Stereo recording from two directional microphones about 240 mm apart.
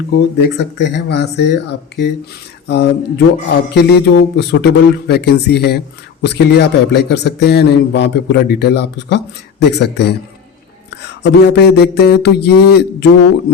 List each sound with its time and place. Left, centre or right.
0.3 s a man's voice: left